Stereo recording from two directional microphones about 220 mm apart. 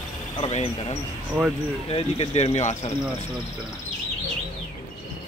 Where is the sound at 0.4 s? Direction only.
25° left (ahead or behind).